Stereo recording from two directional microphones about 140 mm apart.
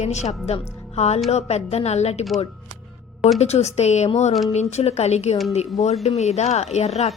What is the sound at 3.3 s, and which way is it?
Speech, 50° left (ahead or behind).